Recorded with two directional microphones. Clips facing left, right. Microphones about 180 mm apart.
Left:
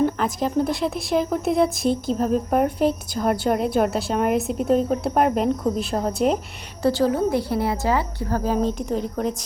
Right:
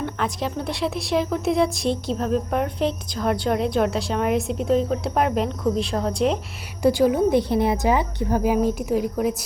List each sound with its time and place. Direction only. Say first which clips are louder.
0.0 s speech: left 5 dB; centre (ahead or behind)
6.8 s a woman's voice: right 2 dB; 15° right (ahead or behind)